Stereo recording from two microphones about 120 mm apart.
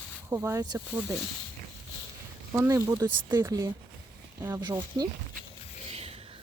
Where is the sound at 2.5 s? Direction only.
25° right (ahead or behind).